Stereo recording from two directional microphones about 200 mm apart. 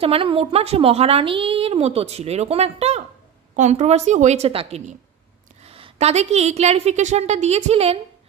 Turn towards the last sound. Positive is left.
turn(degrees=-30)  # may be behind; listen again after turning